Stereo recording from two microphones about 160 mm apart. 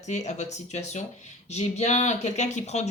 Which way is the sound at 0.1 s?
45° left (ahead or behind).